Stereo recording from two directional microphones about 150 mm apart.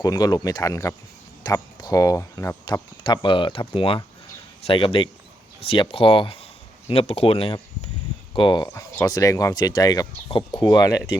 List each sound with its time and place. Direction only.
0.0 s speech: 25° left (ahead or behind)
3.0 s speech: 30° left (ahead or behind)